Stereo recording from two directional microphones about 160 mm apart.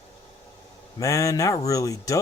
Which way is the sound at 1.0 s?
20° left (ahead or behind).